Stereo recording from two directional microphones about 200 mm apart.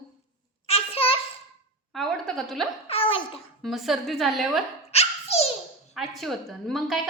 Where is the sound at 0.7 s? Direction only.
30° left (ahead or behind).